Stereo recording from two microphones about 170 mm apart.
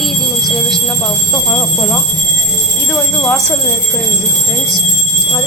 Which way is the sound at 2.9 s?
Centre (ahead or behind).